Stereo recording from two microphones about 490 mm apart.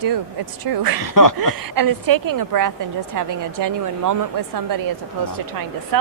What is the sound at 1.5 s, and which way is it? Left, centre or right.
Speech, right.